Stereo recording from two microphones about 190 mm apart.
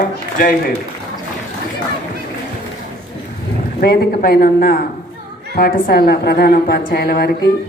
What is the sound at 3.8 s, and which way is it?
A woman's voice, 55° left (ahead or behind).